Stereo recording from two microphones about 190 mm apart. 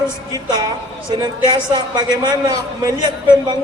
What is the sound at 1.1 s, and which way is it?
A woman's voice, 20° right (ahead or behind).